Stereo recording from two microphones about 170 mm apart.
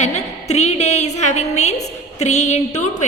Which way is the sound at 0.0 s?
40° left (ahead or behind).